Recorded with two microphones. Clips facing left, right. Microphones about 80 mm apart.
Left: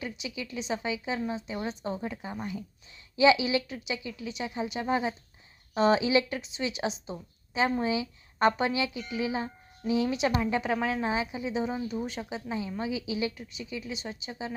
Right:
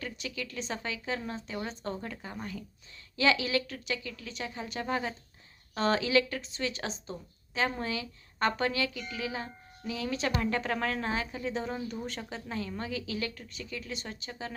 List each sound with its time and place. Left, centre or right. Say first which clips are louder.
0.0 s speech: left 2 dB; centre